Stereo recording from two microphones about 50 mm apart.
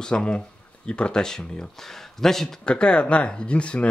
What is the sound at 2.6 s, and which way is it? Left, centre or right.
Speech, left.